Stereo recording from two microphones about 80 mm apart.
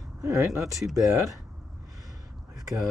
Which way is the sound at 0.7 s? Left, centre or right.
Centre.